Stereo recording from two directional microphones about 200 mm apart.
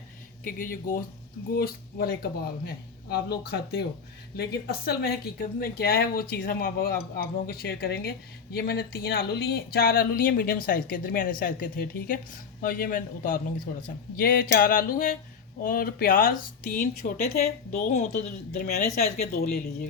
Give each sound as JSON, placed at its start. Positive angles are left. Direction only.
{"t": 0.4, "sound": "speech", "side_deg": 45}